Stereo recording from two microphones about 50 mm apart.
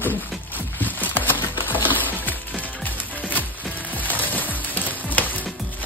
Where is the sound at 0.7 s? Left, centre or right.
Left.